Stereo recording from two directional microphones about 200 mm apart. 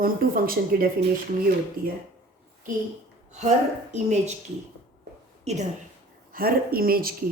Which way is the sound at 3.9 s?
35° right (ahead or behind).